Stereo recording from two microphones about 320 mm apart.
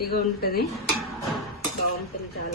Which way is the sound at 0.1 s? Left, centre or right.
Left.